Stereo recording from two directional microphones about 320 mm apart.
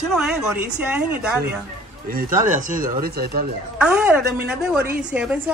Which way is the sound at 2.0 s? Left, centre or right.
Right.